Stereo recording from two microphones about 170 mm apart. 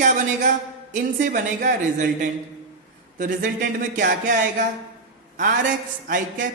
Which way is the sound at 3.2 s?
50° right (ahead or behind).